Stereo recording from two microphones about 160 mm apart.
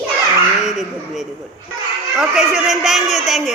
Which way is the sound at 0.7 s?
Centre (ahead or behind).